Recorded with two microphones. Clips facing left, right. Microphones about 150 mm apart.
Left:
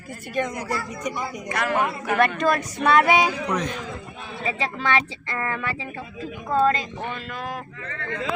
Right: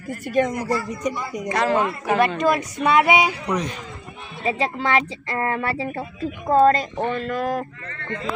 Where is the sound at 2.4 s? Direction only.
10° right (ahead or behind).